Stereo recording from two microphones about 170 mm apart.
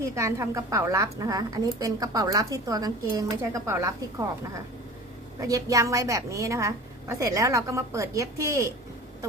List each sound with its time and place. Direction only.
0.2 s a woman's voice: 15° right (ahead or behind)
5.4 s a woman's voice: 20° right (ahead or behind)